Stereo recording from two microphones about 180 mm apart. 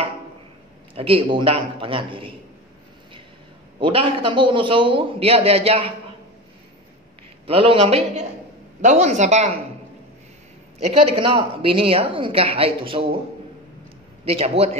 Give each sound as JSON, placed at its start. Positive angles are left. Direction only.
{"t": 0.9, "sound": "a man's voice", "side_deg": -30}
{"t": 3.8, "sound": "a man's voice", "side_deg": -30}
{"t": 7.4, "sound": "a woman's voice", "side_deg": -30}
{"t": 10.8, "sound": "a woman's voice", "side_deg": -35}
{"t": 14.2, "sound": "a woman's voice", "side_deg": -35}